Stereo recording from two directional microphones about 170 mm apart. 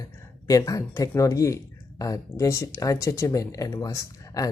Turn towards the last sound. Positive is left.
turn(degrees=20)  # may be behind; listen again after turning